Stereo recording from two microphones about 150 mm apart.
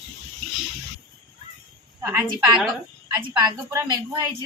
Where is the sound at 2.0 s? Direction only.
20° right (ahead or behind).